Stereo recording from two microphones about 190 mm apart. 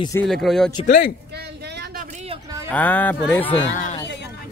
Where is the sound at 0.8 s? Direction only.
45° left (ahead or behind).